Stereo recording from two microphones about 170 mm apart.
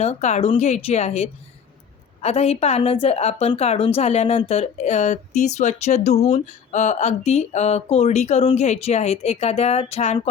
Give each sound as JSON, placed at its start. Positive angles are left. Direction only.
{"t": 0.0, "sound": "a woman's voice", "side_deg": 40}